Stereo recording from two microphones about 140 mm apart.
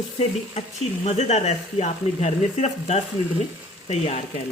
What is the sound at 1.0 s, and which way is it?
Speech, 55° left (ahead or behind).